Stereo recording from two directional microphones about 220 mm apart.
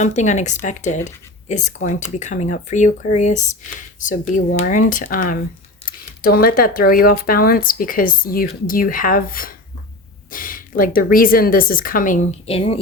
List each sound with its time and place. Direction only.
0.0 s speech: 30° left (ahead or behind)